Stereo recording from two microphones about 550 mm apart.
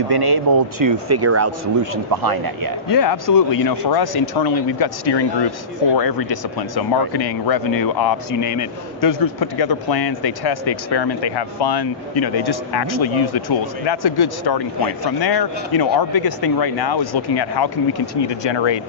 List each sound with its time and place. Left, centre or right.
0.1 s speech: right
2.9 s a man's voice: left